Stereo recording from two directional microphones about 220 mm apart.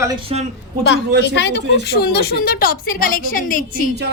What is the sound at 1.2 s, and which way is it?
A woman's voice, 50° left (ahead or behind).